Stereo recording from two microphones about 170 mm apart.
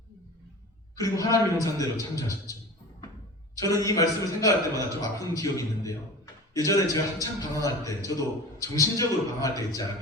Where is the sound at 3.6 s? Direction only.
20° left (ahead or behind).